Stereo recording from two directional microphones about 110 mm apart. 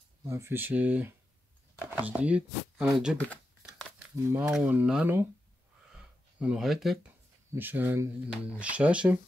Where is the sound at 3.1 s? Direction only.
10° left (ahead or behind).